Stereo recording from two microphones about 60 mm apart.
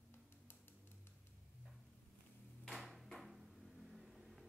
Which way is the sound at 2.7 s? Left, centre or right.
Centre.